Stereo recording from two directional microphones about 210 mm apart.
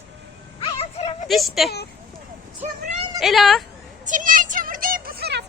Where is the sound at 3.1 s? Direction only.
Centre (ahead or behind).